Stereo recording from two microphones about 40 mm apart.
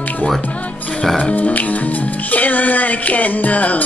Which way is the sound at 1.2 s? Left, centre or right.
Left.